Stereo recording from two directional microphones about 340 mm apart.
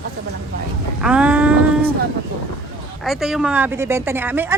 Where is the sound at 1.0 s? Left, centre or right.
Centre.